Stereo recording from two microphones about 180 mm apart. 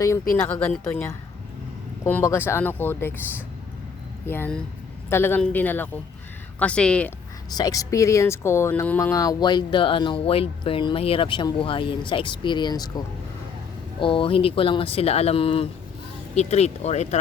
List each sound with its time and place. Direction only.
0.6 s speech: 10° left (ahead or behind)
4.3 s speech: 10° left (ahead or behind)
7.5 s speech: 20° left (ahead or behind)
14.0 s speech: 30° left (ahead or behind)